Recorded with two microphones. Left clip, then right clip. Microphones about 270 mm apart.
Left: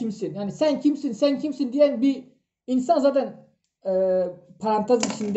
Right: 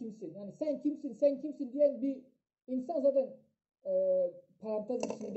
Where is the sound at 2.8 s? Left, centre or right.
Left.